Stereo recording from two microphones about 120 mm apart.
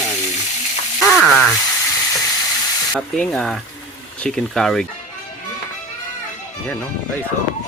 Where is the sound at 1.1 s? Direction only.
5° left (ahead or behind).